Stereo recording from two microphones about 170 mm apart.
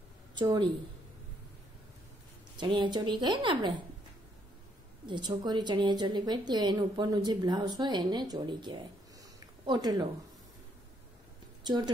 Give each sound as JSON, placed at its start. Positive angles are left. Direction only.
{"t": 0.4, "sound": "a woman's voice", "side_deg": -25}
{"t": 2.5, "sound": "a woman's voice", "side_deg": -30}
{"t": 5.0, "sound": "a woman's voice", "side_deg": -25}
{"t": 11.6, "sound": "speech", "side_deg": -25}